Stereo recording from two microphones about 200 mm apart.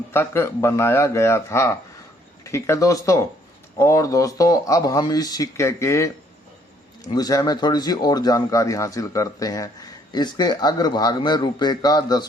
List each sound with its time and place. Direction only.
0.1 s speech: 10° left (ahead or behind)